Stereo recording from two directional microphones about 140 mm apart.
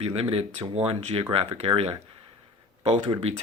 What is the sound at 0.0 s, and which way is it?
Speech, 45° right (ahead or behind).